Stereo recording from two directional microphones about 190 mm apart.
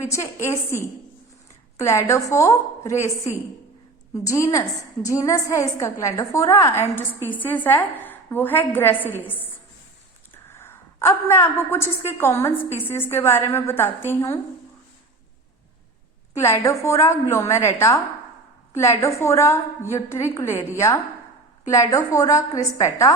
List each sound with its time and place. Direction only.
0.0 s a woman's voice: 15° left (ahead or behind)
16.3 s a woman's voice: 15° left (ahead or behind)